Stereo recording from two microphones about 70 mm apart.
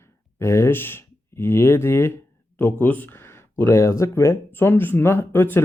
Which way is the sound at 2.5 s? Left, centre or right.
Left.